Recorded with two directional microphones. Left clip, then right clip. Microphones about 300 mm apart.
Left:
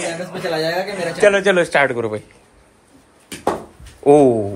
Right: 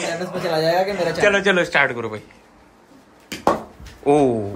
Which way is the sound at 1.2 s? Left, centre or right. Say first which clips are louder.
Left 4 dB; centre.